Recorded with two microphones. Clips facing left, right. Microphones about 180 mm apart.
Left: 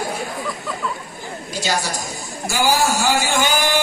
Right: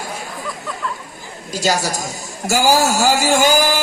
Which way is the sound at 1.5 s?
40° right (ahead or behind).